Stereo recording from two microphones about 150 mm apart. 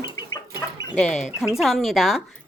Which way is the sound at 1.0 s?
Centre (ahead or behind).